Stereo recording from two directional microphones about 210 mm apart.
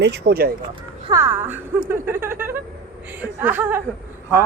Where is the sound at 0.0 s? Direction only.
50° right (ahead or behind).